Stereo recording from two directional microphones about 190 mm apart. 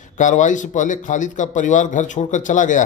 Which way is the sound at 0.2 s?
40° left (ahead or behind).